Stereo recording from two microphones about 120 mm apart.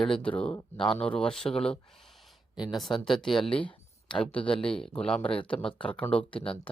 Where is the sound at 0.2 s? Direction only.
45° left (ahead or behind).